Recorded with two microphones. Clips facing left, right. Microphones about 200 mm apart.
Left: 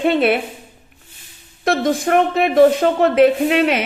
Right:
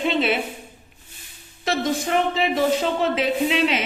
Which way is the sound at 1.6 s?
55° left (ahead or behind).